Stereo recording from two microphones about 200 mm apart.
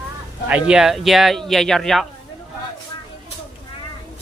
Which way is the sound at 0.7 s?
Centre (ahead or behind).